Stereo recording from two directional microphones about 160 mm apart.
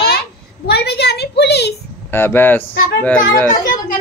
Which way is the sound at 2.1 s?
15° left (ahead or behind).